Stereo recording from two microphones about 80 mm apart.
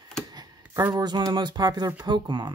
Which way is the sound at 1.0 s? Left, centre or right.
Right.